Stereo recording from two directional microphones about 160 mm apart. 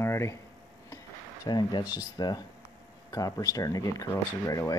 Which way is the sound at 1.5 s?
25° left (ahead or behind).